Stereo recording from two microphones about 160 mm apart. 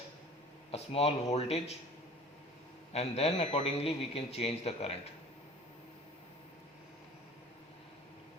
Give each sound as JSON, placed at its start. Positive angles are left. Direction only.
{"t": 0.7, "sound": "a man's voice", "side_deg": 40}
{"t": 2.9, "sound": "a man's voice", "side_deg": 40}